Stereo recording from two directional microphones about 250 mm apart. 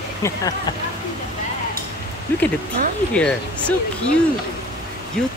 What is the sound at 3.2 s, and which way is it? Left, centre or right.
Speech, centre.